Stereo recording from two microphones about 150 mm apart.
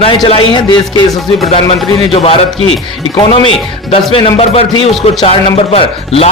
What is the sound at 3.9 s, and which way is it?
A man's voice, 40° left (ahead or behind).